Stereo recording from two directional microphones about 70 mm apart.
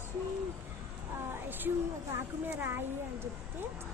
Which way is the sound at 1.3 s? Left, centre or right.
Right.